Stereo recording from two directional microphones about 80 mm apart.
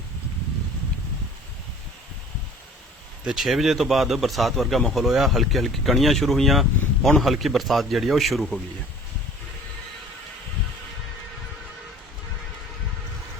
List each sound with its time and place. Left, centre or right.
3.3 s speech: centre